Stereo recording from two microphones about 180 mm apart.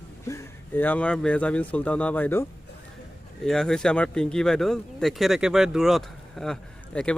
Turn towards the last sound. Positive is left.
turn(degrees=5)  # may be behind; listen again after turning